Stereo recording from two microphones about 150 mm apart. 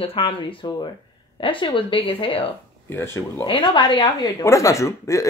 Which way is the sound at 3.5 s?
35° left (ahead or behind).